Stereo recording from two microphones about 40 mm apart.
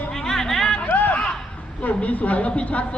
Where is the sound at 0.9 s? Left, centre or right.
Left.